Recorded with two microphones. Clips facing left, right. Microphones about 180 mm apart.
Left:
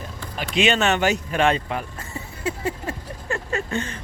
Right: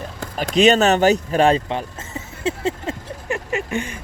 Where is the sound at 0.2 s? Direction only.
45° right (ahead or behind).